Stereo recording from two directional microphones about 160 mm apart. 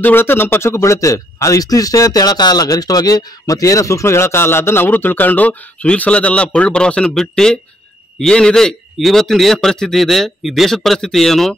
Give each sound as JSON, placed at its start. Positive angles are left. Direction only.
{"t": 0.0, "sound": "a man's voice", "side_deg": 15}